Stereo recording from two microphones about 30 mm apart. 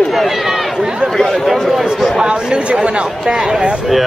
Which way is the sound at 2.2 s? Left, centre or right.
Right.